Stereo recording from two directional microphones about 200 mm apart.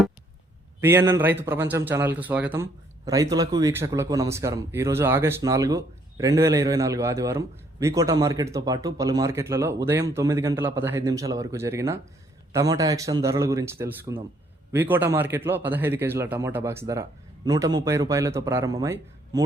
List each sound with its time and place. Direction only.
0.8 s speech: 10° right (ahead or behind)